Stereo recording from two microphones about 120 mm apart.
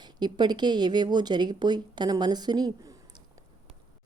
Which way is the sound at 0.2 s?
35° right (ahead or behind).